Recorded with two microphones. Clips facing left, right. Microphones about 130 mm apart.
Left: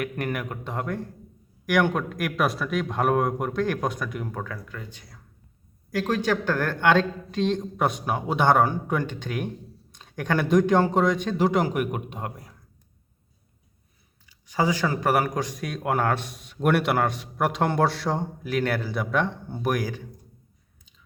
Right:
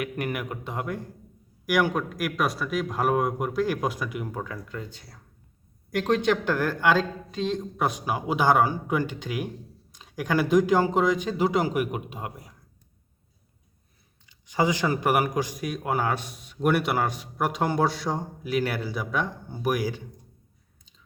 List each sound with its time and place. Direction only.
0.0 s a man's voice: 10° right (ahead or behind)
4.4 s a man's voice: 25° right (ahead or behind); by 12.5 s 10° right (ahead or behind)
14.3 s a man's voice: 20° right (ahead or behind); by 18.3 s centre (ahead or behind)
18.5 s speech: 15° right (ahead or behind)
18.9 s a man's voice: centre (ahead or behind)